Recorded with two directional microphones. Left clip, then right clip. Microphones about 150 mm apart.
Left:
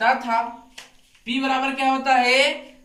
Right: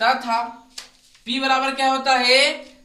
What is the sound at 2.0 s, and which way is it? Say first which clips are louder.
Speech: right 1 dB; 15° right (ahead or behind).